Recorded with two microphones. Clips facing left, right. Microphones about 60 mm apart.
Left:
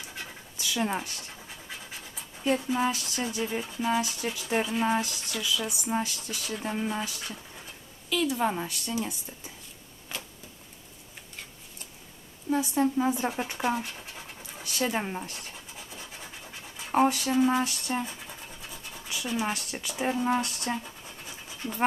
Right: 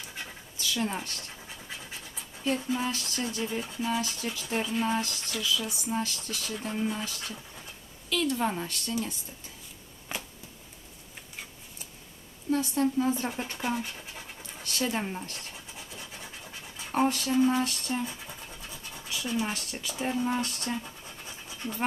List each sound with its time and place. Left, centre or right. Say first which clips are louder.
0.7 s speech: left 2 dB; centre
2.7 s speech: left 3 dB; centre
10.1 s a sound: right 2 dB; centre
12.5 s speech: left 1 dB; centre
13.8 s scratch: even; centre
16.7 s pant: left 3 dB; centre
17.3 s speech: even; centre
18.0 s scratch: right 1 dB; centre
20.8 s scratch: even; centre